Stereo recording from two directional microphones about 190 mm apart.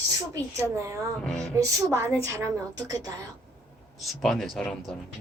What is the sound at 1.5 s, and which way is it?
A woman's voice, 15° right (ahead or behind).